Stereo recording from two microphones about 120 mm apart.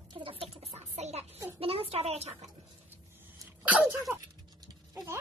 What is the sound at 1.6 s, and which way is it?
Speech, 55° right (ahead or behind).